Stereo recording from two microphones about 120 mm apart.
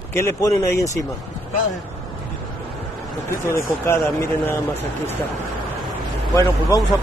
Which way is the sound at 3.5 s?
25° left (ahead or behind).